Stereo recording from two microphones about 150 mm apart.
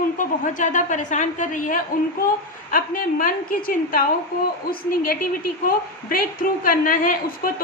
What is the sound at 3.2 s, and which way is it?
A woman's voice, 70° left (ahead or behind).